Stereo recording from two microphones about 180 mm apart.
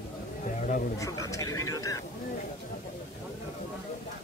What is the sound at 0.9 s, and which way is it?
Speech, 20° left (ahead or behind).